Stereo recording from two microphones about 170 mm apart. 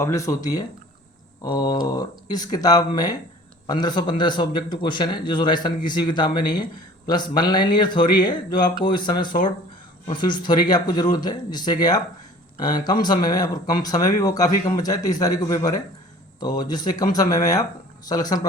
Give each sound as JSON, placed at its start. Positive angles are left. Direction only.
{"t": 0.0, "sound": "a man's voice", "side_deg": 20}